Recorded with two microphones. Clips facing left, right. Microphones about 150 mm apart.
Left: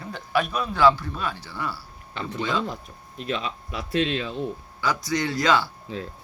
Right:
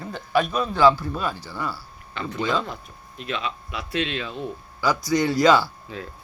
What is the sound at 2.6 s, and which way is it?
Speech, 40° left (ahead or behind).